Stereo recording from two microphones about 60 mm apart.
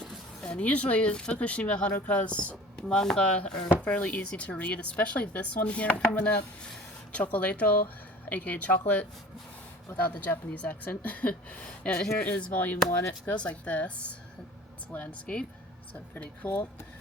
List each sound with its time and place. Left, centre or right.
0.4 s speech: left
12.2 s speech: left